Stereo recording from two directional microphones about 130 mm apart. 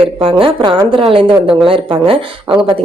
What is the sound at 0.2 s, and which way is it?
A woman's voice, 45° right (ahead or behind).